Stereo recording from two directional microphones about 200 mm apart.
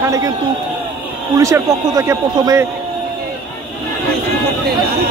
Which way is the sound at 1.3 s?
15° right (ahead or behind).